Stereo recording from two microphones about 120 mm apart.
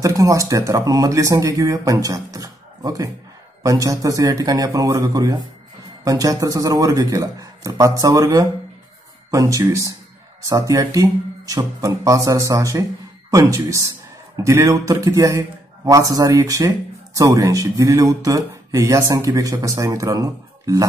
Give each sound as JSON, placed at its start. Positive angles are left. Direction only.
{"t": 0.0, "sound": "speech", "side_deg": -25}